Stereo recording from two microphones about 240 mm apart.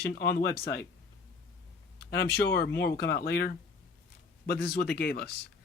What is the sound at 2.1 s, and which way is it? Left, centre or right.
Speech, left.